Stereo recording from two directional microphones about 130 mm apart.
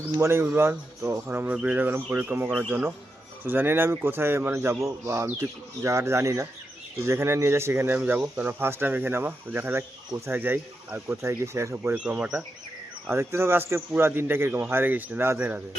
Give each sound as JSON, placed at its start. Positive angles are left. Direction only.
{"t": 0.2, "sound": "speech", "side_deg": -20}
{"t": 13.1, "sound": "speech", "side_deg": -20}